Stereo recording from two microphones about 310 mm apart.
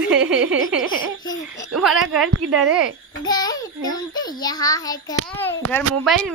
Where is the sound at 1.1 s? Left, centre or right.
Left.